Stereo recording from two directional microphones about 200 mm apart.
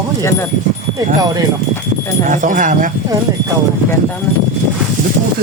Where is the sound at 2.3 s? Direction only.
40° right (ahead or behind).